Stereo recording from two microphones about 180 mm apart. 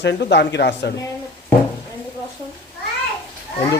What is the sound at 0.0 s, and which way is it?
Speech, 75° left (ahead or behind).